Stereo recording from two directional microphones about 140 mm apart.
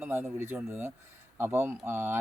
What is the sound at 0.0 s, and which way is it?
Speech, 15° right (ahead or behind).